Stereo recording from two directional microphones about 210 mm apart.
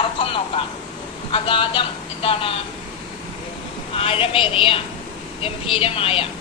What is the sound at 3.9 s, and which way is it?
A woman's voice, 25° left (ahead or behind).